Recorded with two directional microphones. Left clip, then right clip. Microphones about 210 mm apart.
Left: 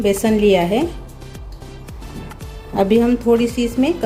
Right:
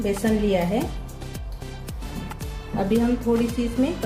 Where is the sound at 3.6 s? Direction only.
50° left (ahead or behind).